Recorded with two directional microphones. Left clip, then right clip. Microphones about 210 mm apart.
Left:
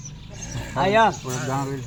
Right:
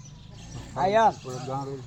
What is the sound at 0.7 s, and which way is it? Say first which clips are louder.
Speech: left 3 dB; 35° left (ahead or behind).